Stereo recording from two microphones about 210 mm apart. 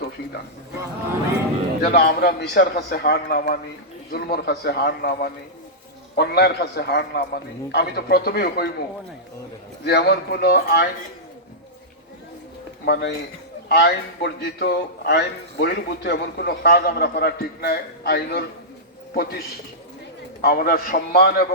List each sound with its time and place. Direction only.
1.8 s a man's voice: 45° left (ahead or behind)
9.8 s a man's voice: 50° left (ahead or behind)
12.8 s a man's voice: 50° left (ahead or behind)